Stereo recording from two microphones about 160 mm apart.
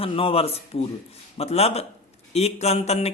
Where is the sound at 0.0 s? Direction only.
35° left (ahead or behind).